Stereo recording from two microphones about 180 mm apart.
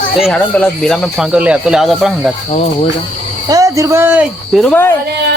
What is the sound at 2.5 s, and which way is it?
Cricket, 35° left (ahead or behind).